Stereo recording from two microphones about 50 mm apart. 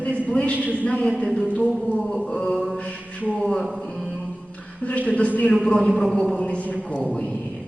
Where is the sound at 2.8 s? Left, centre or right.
Left.